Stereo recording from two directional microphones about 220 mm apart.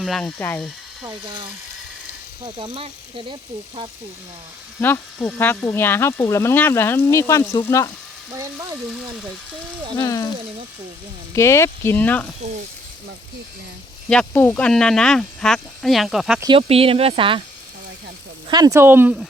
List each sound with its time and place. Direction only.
0.0 s speech: centre (ahead or behind)
1.0 s speech: 25° right (ahead or behind)
2.6 s speech: 25° right (ahead or behind)
4.8 s speech: 10° left (ahead or behind)
8.4 s speech: 15° right (ahead or behind)
10.0 s speech: 20° left (ahead or behind)
11.3 s speech: 10° left (ahead or behind)
14.1 s speech: 5° left (ahead or behind)
16.4 s speech: 25° right (ahead or behind)
18.4 s speech: 20° right (ahead or behind)